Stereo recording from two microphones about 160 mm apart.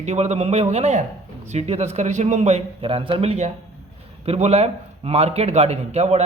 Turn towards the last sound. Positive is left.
turn(degrees=-45)  # may be behind; listen again after turning